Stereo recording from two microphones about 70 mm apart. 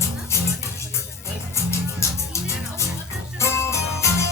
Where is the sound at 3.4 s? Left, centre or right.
Left.